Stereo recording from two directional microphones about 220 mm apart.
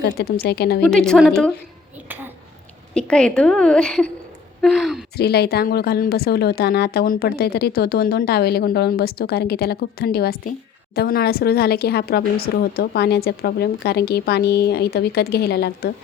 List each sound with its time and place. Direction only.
0.0 s a woman's voice: 45° left (ahead or behind)
0.8 s a woman's voice: 5° left (ahead or behind)
2.9 s a woman's voice: 5° left (ahead or behind)
5.1 s a woman's voice: 45° left (ahead or behind)